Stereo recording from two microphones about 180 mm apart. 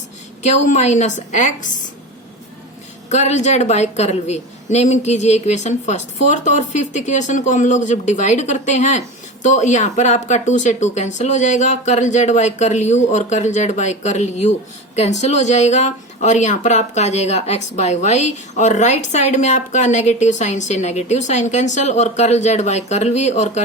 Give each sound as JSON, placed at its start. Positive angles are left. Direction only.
{"t": 0.4, "sound": "a woman's voice", "side_deg": 40}
{"t": 3.1, "sound": "a woman's voice", "side_deg": 40}